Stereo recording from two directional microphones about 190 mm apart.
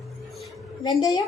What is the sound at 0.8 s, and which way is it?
Speech, 20° left (ahead or behind).